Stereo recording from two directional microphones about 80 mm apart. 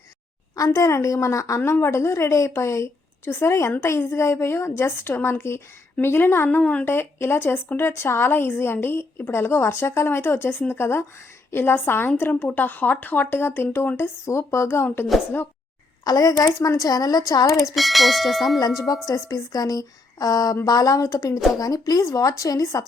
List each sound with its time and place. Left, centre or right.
0.5 s a woman's voice: left
6.6 s a woman's voice: centre
6.8 s speech: left
16.0 s speech: left
17.7 s bell: centre
18.9 s a woman's voice: left